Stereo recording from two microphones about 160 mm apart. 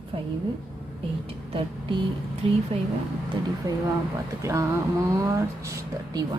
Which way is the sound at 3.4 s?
30° right (ahead or behind).